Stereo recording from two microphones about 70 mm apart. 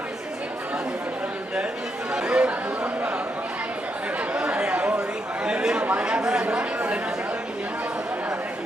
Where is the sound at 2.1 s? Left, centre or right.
Centre.